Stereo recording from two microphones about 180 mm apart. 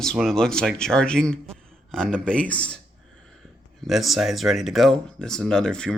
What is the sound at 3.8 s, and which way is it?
Speech, centre (ahead or behind).